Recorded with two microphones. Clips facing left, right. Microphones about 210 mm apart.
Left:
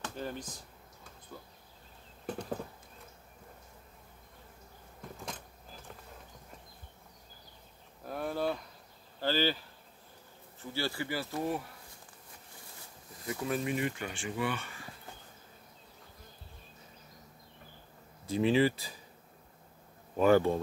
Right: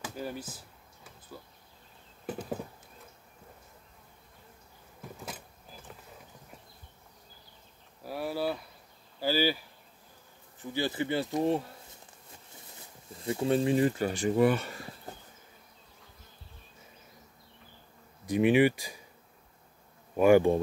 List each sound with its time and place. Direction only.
0.0 s a sound: 10° right (ahead or behind)
5.0 s vehicle: 5° right (ahead or behind)
8.0 s a sound: 5° right (ahead or behind)
9.2 s speech: 10° right (ahead or behind); by 11.7 s 25° right (ahead or behind)
13.1 s speech: 30° right (ahead or behind)
18.2 s speech: 15° right (ahead or behind)
20.2 s speech: 15° right (ahead or behind)